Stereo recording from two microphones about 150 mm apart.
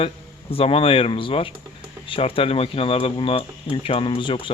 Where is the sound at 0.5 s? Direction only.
40° left (ahead or behind).